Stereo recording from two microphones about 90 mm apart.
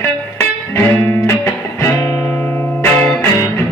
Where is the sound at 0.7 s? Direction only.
30° left (ahead or behind).